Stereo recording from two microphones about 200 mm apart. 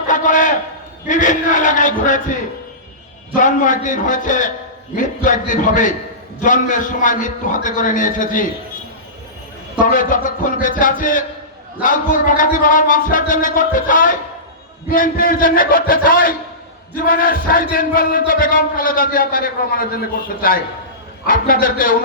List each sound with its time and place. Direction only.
0.1 s a sound: 40° left (ahead or behind)
1.0 s a man's voice: 40° left (ahead or behind)
3.3 s a man's voice: 40° left (ahead or behind)
9.8 s a man's voice: 40° left (ahead or behind)